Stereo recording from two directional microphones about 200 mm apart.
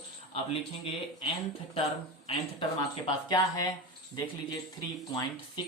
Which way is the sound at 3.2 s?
20° left (ahead or behind).